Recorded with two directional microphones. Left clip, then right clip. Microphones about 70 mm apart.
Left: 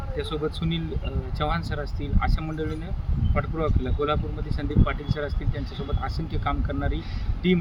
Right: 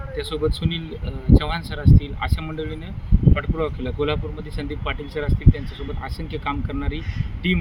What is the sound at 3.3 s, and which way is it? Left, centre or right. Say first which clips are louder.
Speech: left 1 dB; centre.